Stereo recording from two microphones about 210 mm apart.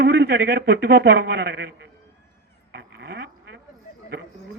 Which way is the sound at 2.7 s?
50° right (ahead or behind).